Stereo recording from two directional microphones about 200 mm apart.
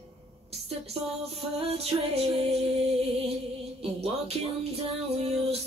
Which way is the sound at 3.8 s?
30° right (ahead or behind).